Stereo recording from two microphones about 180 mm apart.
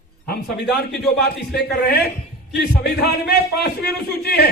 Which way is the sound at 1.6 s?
60° left (ahead or behind).